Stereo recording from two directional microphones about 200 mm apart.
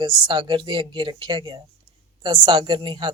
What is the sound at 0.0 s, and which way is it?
A woman's voice, 25° right (ahead or behind).